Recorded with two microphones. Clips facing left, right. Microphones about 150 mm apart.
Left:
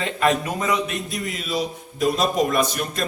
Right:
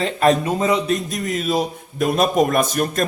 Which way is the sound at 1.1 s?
45° right (ahead or behind).